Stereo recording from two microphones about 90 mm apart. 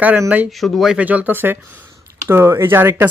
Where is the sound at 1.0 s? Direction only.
15° right (ahead or behind).